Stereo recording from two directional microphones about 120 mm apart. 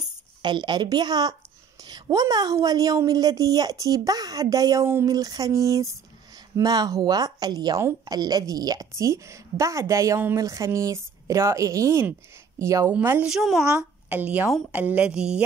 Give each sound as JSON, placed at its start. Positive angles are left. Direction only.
{"t": 0.0, "sound": "a woman's voice", "side_deg": -40}
{"t": 12.9, "sound": "a woman's voice", "side_deg": -15}
{"t": 13.3, "sound": "a woman's voice", "side_deg": 0}
{"t": 14.0, "sound": "a woman's voice", "side_deg": -15}